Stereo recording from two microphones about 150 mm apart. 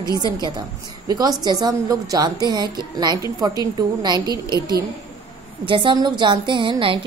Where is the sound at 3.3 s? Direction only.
25° right (ahead or behind).